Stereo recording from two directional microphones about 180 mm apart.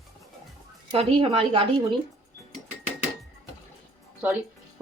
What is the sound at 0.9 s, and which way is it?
Speech, 30° right (ahead or behind).